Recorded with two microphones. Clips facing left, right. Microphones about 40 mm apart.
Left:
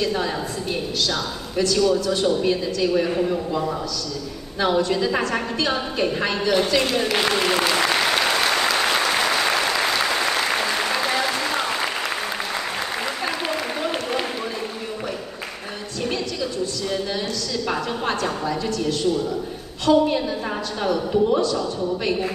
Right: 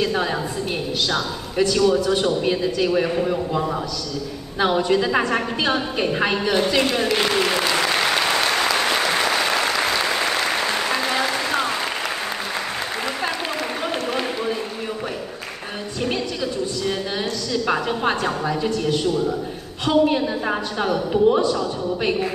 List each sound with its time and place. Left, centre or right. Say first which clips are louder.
0.0 s a woman's voice: right 2 dB; centre
10.9 s applause: right 1 dB; centre
13.8 s a sound: right 1 dB; centre
17.5 s a woman's voice: right 5 dB; centre